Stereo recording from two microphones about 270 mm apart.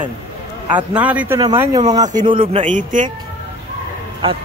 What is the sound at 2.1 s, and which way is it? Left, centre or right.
Speech, right.